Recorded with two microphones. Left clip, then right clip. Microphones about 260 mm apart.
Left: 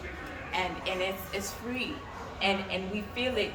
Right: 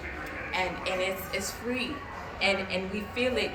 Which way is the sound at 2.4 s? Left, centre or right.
Left.